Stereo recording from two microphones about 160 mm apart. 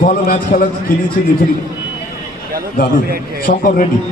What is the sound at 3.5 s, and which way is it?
Speech, 60° left (ahead or behind).